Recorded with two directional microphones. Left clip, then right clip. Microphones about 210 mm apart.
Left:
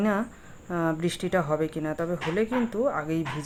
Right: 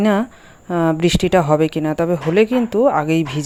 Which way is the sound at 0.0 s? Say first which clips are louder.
Right 10 dB; 35° right (ahead or behind).